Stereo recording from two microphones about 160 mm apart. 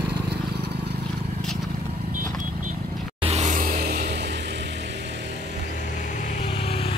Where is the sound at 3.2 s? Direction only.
45° right (ahead or behind); by 4.0 s 60° right (ahead or behind).